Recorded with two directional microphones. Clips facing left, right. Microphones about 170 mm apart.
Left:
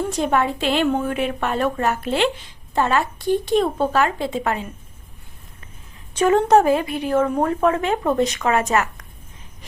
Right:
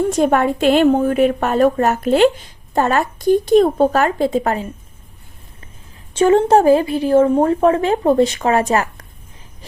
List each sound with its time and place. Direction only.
0.1 s a woman's voice: 50° right (ahead or behind)
6.1 s a woman's voice: 30° right (ahead or behind)